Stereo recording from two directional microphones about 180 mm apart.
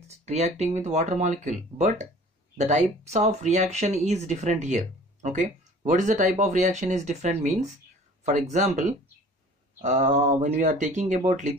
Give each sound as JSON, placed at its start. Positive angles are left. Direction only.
{"t": 0.1, "sound": "speech", "side_deg": -40}